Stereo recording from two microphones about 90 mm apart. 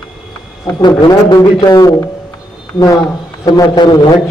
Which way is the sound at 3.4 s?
50° left (ahead or behind).